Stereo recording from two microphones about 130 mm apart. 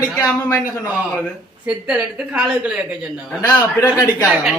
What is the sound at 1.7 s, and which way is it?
A woman's voice, 5° right (ahead or behind).